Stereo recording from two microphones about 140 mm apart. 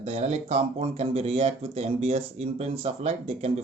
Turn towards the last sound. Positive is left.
turn(degrees=-45)  # may be behind; listen again after turning